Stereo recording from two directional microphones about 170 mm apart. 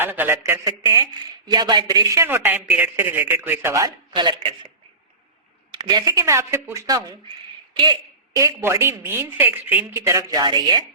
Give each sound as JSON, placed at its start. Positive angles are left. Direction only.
{"t": 0.0, "sound": "speech", "side_deg": -10}
{"t": 5.7, "sound": "speech", "side_deg": -25}
{"t": 8.4, "sound": "speech", "side_deg": -15}